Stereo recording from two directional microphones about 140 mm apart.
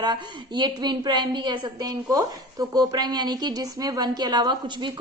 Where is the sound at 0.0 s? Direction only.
35° right (ahead or behind).